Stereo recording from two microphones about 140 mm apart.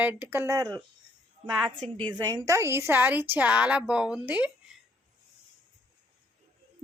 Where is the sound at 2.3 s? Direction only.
25° right (ahead or behind).